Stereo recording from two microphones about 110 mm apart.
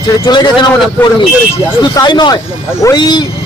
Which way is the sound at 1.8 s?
40° left (ahead or behind).